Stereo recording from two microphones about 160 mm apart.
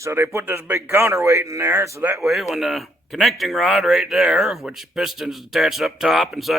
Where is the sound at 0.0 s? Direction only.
15° right (ahead or behind).